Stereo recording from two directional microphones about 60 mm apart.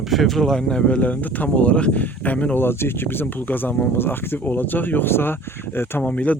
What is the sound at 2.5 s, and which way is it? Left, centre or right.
Speech, left.